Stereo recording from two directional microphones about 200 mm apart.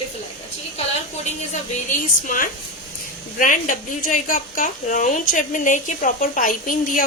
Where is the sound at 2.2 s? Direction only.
45° left (ahead or behind).